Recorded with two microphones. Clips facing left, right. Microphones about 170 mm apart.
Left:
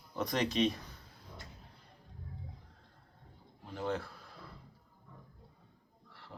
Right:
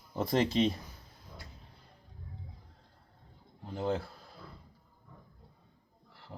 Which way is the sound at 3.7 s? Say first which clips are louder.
Right 3 dB; 20° right (ahead or behind).